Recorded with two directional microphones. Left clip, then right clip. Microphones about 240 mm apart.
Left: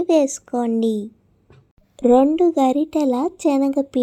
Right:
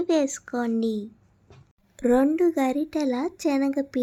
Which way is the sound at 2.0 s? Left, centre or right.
Centre.